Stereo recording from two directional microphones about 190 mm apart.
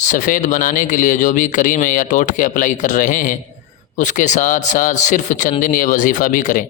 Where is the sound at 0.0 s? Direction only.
40° left (ahead or behind).